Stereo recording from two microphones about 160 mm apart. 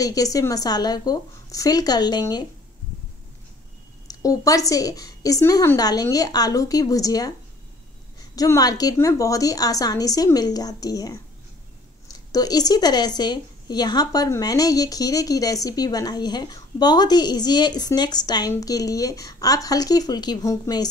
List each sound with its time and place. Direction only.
0.0 s a woman's voice: 20° left (ahead or behind)
4.1 s a woman's voice: 20° left (ahead or behind)
8.4 s a woman's voice: 25° left (ahead or behind)
12.3 s a woman's voice: 25° left (ahead or behind)